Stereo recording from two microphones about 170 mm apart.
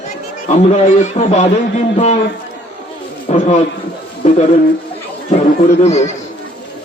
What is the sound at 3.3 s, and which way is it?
Speech, 40° left (ahead or behind).